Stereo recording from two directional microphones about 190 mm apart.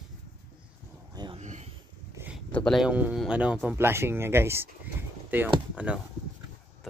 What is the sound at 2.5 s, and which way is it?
Speech, 5° left (ahead or behind).